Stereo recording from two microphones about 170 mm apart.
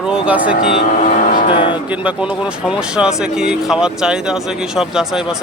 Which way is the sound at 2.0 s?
5° right (ahead or behind).